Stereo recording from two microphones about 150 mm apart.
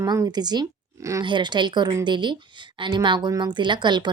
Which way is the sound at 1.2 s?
30° right (ahead or behind).